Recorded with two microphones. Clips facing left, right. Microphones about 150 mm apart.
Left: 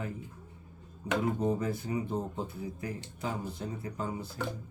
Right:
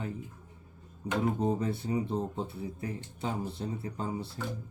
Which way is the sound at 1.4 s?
30° right (ahead or behind).